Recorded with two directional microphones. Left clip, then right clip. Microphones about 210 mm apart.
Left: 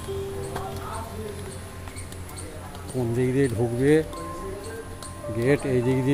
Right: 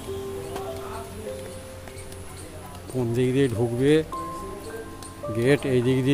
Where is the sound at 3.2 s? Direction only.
15° right (ahead or behind).